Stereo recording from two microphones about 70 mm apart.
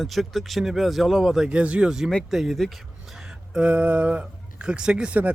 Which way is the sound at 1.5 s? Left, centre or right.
Centre.